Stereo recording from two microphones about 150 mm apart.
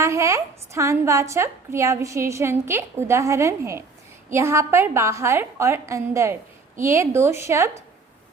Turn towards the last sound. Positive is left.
turn(degrees=-20)  # may be behind; listen again after turning